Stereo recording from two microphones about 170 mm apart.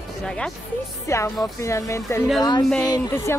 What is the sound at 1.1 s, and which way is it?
Speech, 15° left (ahead or behind).